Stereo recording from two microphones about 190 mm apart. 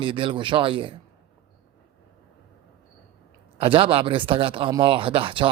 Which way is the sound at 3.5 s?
30° right (ahead or behind).